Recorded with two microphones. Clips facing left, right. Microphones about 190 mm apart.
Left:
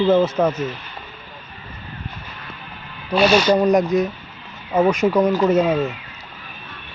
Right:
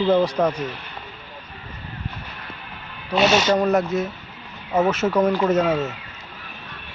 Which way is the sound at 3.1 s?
20° right (ahead or behind).